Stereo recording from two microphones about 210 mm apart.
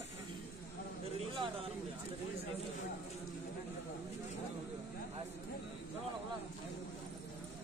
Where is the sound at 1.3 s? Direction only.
25° right (ahead or behind).